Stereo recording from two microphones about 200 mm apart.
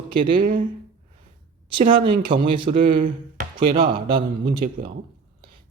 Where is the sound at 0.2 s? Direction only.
25° right (ahead or behind).